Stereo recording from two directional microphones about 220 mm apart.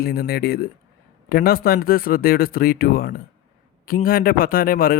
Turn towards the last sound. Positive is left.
turn(degrees=40)  # may be behind; listen again after turning